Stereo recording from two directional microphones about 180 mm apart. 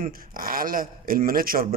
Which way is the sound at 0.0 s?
50° right (ahead or behind).